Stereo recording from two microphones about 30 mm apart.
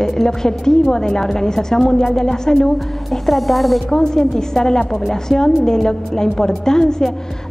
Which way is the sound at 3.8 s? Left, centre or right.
Centre.